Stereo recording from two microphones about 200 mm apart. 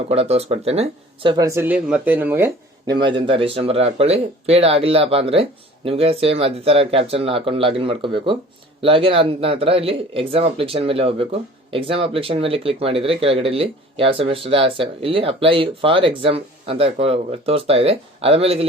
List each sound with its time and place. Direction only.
0.1 s speech: 30° right (ahead or behind)